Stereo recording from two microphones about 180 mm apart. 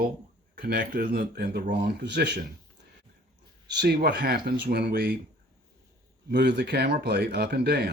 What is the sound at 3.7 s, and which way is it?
Speech, 65° right (ahead or behind).